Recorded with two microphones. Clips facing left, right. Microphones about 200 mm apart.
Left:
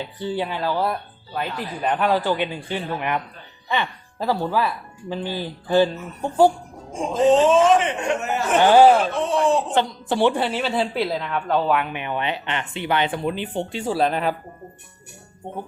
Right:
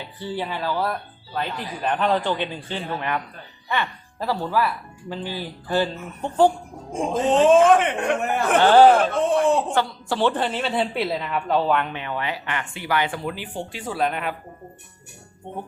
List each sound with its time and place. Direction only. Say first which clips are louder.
0.2 s speech: left 2 dB; 15° left (ahead or behind)
7.1 s a man's voice: left 1 dB; 55° right (ahead or behind)
8.5 s speech: even; 10° left (ahead or behind)
9.3 s a man's voice: left 1 dB; 55° right (ahead or behind)
9.7 s a woman's voice: left 2 dB; 20° left (ahead or behind)
11.9 s speech: left 2 dB; 20° left (ahead or behind)